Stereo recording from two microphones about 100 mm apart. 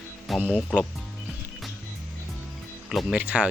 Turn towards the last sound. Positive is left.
turn(degrees=-15)  # may be behind; listen again after turning